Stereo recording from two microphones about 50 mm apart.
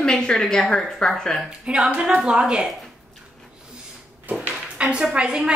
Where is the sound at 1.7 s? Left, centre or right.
Right.